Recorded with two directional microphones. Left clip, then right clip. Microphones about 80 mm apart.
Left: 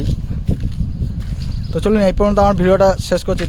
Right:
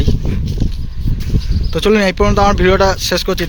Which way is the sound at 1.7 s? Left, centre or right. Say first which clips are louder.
Right 3 dB; centre.